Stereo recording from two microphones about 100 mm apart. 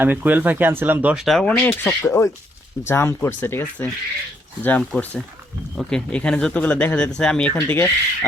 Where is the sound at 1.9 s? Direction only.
30° left (ahead or behind).